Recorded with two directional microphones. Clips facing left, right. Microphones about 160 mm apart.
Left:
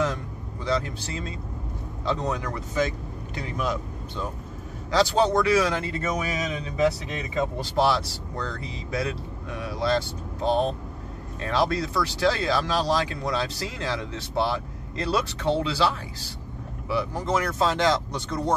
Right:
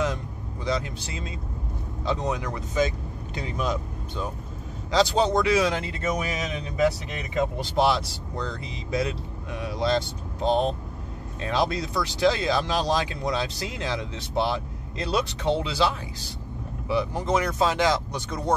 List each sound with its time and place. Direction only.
0.7 s speech: 15° right (ahead or behind)
6.8 s speech: 25° left (ahead or behind)
7.5 s speech: 15° right (ahead or behind)